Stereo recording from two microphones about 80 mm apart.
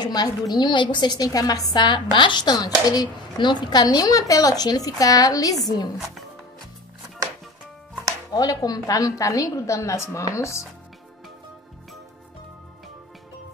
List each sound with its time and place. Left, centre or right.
0.0 s speech: left
2.1 s speech: left
8.3 s a woman's voice: left